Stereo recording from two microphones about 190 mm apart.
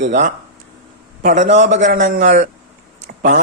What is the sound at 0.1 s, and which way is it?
A man's voice, 40° right (ahead or behind).